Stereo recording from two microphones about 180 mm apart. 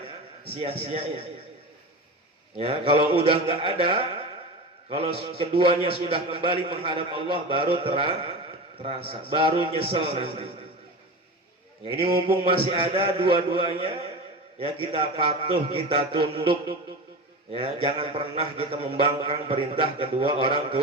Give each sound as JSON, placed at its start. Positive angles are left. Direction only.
{"t": 0.5, "sound": "a man's voice", "side_deg": -35}
{"t": 2.6, "sound": "a man's voice", "side_deg": -30}
{"t": 12.0, "sound": "a man's voice", "side_deg": -30}
{"t": 15.0, "sound": "a man's voice", "side_deg": -35}